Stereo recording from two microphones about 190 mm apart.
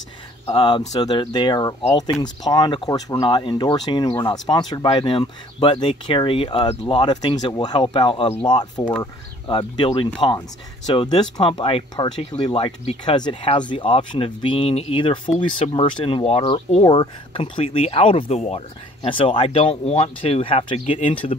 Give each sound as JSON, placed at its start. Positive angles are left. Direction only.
{"t": 0.5, "sound": "speech", "side_deg": 25}